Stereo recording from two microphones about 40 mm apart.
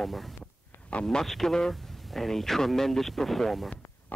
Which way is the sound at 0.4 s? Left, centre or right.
Left.